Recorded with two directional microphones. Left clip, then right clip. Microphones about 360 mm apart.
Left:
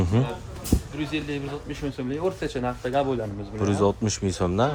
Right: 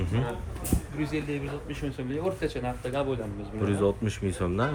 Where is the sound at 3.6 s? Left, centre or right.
Centre.